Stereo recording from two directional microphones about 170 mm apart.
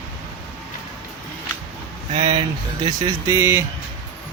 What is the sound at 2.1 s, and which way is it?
Speech, 30° right (ahead or behind).